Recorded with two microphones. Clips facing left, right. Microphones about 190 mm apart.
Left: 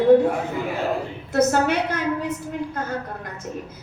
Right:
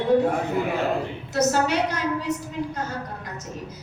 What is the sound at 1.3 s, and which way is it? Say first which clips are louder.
A woman's voice: left 3 dB; 55° left (ahead or behind).